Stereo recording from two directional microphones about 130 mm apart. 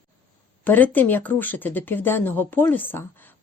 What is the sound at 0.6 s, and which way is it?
Speech, 15° left (ahead or behind).